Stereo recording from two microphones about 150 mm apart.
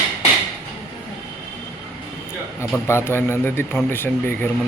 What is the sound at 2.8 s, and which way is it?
A man's voice, 15° left (ahead or behind).